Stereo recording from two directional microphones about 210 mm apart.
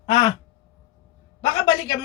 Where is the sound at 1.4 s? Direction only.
25° left (ahead or behind).